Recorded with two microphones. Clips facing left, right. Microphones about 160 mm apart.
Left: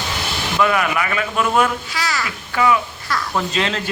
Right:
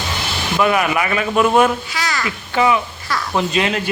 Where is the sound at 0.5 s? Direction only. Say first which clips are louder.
Right 2 dB; 20° right (ahead or behind).